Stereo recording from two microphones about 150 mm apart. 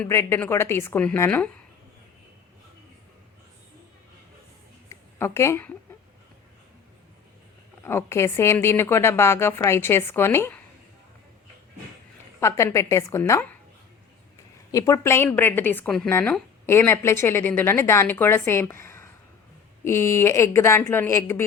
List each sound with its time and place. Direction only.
0.0 s a woman's voice: 15° left (ahead or behind)
4.9 s a sound: 20° left (ahead or behind)
7.8 s a woman's voice: 15° left (ahead or behind)
12.4 s a woman's voice: 20° left (ahead or behind)
14.7 s a woman's voice: 20° left (ahead or behind)